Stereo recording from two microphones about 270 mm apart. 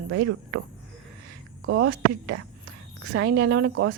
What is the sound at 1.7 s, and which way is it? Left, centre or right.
A woman's voice, right.